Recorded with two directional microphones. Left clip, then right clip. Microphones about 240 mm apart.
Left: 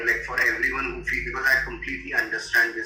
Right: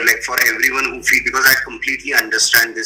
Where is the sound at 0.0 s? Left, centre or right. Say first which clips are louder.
Right 8 dB; right.